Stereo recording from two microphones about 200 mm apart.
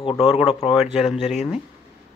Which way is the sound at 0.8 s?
Centre (ahead or behind).